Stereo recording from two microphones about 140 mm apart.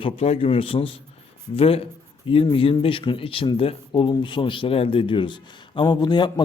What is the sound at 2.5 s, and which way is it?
A man's voice, 40° left (ahead or behind).